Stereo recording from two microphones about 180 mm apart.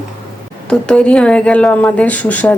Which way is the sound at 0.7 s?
5° left (ahead or behind).